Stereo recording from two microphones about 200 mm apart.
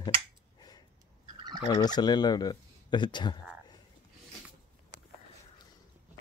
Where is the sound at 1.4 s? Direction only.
20° right (ahead or behind).